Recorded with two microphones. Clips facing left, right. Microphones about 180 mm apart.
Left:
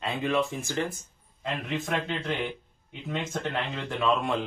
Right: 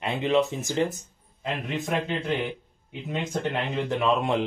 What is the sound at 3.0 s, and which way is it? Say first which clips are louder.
Speech: right 3 dB; 20° right (ahead or behind).